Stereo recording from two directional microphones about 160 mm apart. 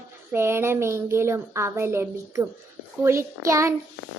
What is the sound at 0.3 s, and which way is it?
Speech, 15° right (ahead or behind).